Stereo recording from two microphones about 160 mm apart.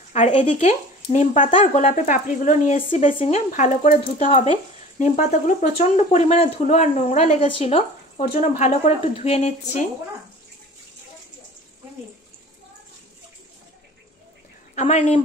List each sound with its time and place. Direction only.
0.1 s speech: 40° left (ahead or behind)
4.9 s speech: 50° left (ahead or behind)
8.3 s speech: 45° left (ahead or behind)
14.8 s speech: 45° left (ahead or behind)